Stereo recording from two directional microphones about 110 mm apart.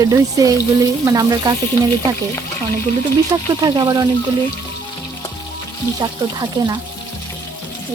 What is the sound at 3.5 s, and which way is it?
Speech, 40° right (ahead or behind).